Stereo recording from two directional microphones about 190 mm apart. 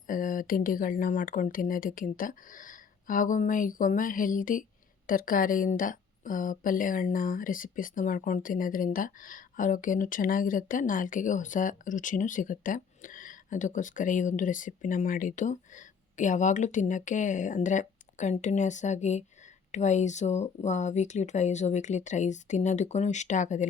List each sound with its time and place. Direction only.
0.1 s a woman's voice: 45° left (ahead or behind)